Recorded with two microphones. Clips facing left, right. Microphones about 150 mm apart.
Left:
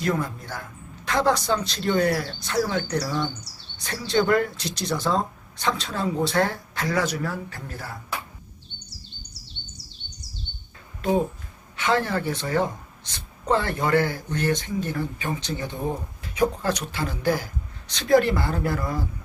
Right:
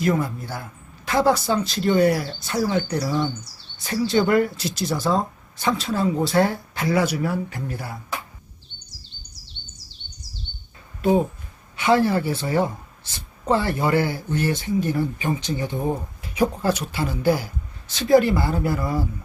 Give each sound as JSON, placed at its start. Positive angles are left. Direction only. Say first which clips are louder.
{"t": 0.0, "sound": "speech", "louder": "right 4 dB", "side_deg": -5}
{"t": 11.7, "sound": "speech", "louder": "right 5 dB", "side_deg": -10}